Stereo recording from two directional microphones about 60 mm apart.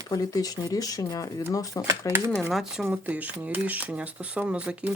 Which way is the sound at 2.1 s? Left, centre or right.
Right.